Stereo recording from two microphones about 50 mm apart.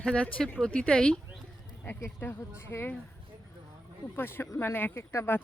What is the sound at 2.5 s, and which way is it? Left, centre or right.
Speech, left.